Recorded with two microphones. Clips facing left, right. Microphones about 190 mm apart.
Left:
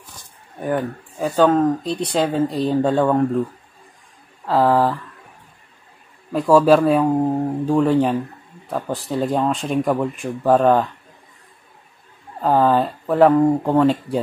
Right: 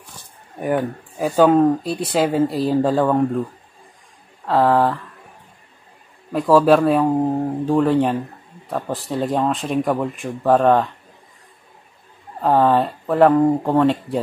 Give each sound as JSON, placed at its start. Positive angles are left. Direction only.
{"t": 0.6, "sound": "speech", "side_deg": -10}
{"t": 4.5, "sound": "speech", "side_deg": 0}
{"t": 6.3, "sound": "speech", "side_deg": 0}
{"t": 12.4, "sound": "speech", "side_deg": 0}